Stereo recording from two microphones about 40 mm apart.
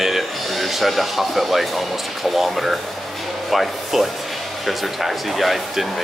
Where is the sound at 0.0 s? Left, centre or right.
Centre.